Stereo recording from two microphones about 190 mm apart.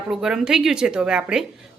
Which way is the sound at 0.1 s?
5° right (ahead or behind).